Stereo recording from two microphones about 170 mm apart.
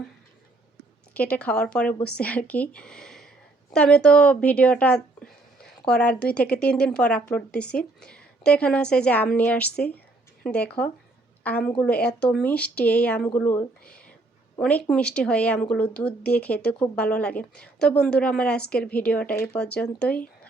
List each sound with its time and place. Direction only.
1.1 s speech: 10° left (ahead or behind)